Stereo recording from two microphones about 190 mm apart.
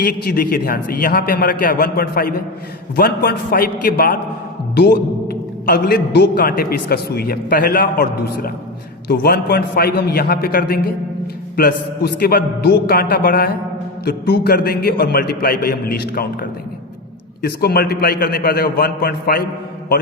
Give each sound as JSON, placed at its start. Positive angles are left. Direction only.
{"t": 0.0, "sound": "a man's voice", "side_deg": 50}
{"t": 4.7, "sound": "a man's voice", "side_deg": 60}